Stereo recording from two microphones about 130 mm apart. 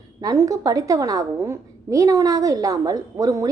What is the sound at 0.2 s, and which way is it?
A woman's voice, 25° right (ahead or behind).